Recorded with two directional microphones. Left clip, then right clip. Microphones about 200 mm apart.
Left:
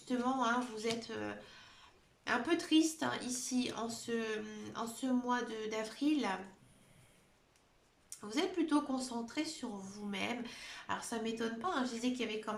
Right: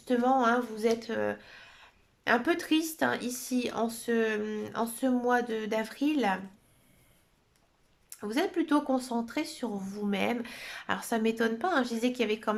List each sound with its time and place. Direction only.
0.1 s speech: 45° right (ahead or behind)
8.1 s speech: 45° right (ahead or behind)